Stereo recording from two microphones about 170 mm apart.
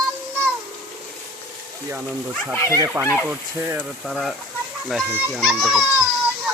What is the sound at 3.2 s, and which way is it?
Speech, 10° right (ahead or behind).